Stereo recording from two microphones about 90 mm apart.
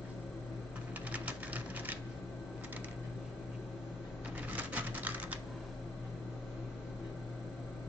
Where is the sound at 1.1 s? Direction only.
15° right (ahead or behind).